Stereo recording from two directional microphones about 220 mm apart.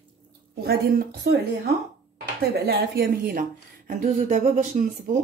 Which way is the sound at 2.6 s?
45° right (ahead or behind).